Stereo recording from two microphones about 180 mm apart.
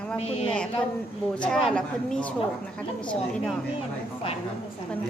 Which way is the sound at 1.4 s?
5° left (ahead or behind).